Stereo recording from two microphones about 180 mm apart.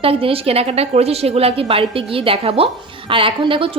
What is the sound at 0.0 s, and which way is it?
A woman's voice, 30° right (ahead or behind).